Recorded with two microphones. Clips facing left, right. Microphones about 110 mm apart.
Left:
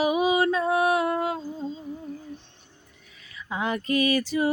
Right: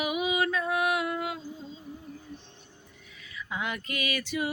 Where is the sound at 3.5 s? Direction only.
35° left (ahead or behind).